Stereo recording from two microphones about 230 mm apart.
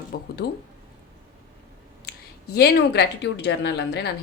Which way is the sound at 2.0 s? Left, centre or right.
Left.